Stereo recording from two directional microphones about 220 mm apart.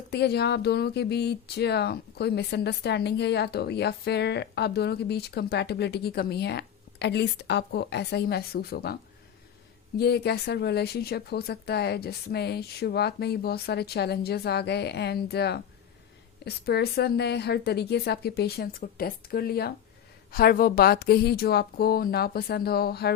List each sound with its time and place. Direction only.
0.1 s speech: 50° left (ahead or behind)
10.0 s speech: 50° left (ahead or behind)